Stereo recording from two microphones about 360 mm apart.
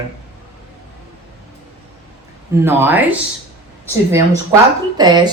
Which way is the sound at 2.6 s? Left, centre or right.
Centre.